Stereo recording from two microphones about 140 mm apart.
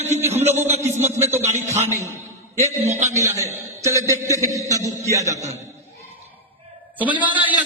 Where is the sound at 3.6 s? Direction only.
20° right (ahead or behind).